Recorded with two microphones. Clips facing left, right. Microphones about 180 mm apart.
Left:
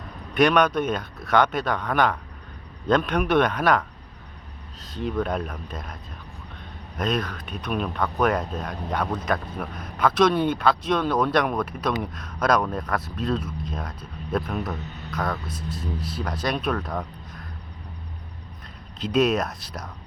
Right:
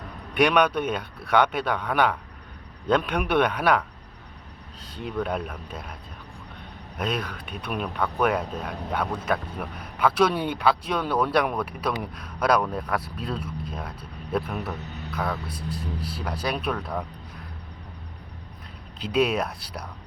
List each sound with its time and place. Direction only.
0.3 s speech: 10° right (ahead or behind)
15.4 s speech: 35° right (ahead or behind)
16.0 s speech: 10° right (ahead or behind)
18.9 s speech: 10° right (ahead or behind)